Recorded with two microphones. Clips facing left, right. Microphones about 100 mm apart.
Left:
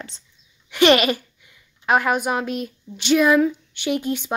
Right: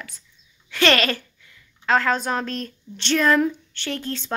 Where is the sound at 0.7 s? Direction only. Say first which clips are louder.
Left 4 dB; 15° left (ahead or behind).